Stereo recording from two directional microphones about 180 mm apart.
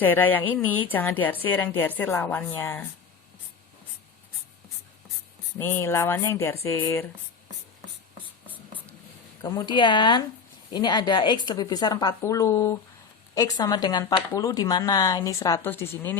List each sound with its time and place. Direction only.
0.0 s speech: 10° left (ahead or behind)
5.5 s speech: 15° left (ahead or behind)
9.4 s speech: 20° left (ahead or behind)